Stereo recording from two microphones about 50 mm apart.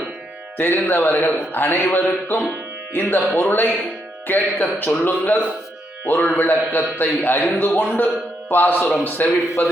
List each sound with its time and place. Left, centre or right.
0.5 s a man's voice: left